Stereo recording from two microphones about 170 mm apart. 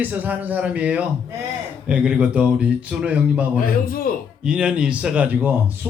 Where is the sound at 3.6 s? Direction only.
60° left (ahead or behind).